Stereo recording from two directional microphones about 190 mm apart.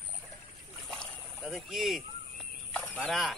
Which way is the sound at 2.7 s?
5° left (ahead or behind).